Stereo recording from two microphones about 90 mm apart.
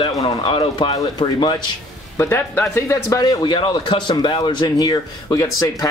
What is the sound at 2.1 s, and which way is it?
Speech, 25° left (ahead or behind).